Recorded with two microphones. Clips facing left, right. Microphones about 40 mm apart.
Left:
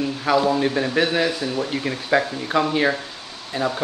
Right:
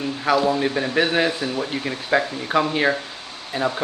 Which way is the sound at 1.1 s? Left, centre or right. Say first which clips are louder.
Even; centre.